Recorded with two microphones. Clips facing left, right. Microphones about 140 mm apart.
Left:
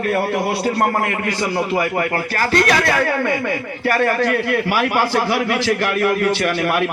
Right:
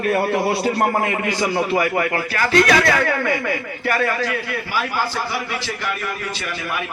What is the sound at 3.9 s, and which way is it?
A man's voice, 50° left (ahead or behind).